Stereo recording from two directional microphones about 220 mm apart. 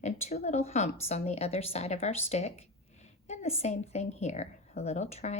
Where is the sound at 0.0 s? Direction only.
30° left (ahead or behind).